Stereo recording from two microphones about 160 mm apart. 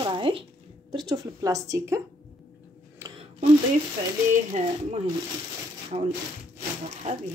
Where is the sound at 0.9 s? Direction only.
25° right (ahead or behind).